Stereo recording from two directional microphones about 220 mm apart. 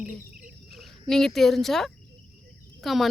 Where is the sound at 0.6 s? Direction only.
Centre (ahead or behind).